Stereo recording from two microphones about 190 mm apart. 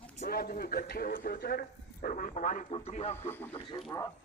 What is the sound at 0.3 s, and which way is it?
Speech, 50° left (ahead or behind).